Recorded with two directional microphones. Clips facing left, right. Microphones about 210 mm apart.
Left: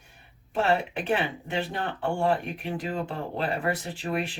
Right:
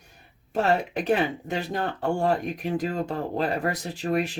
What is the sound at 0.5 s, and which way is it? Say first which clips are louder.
Speech: right 2 dB; 40° right (ahead or behind).